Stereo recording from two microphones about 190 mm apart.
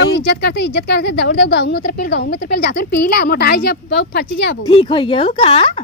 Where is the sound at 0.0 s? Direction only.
60° left (ahead or behind).